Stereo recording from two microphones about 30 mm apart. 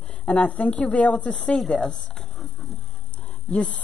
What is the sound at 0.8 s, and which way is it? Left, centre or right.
Speech, left.